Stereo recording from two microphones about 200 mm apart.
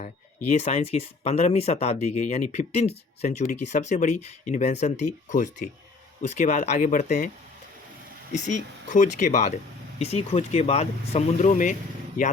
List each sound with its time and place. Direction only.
0.0 s speech: 35° left (ahead or behind)
8.3 s speech: 35° left (ahead or behind)